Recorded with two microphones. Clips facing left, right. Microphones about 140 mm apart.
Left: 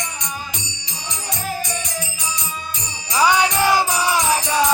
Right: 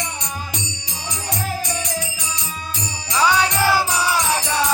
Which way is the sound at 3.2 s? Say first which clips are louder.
Left 1 dB; 15° left (ahead or behind).